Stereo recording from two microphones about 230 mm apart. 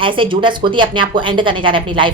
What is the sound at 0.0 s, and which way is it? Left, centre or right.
A woman's voice, right.